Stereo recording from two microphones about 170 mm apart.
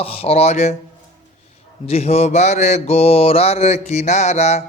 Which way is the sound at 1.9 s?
40° left (ahead or behind).